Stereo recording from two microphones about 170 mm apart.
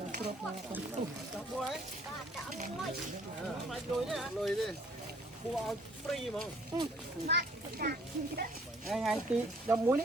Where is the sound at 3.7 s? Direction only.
Centre (ahead or behind).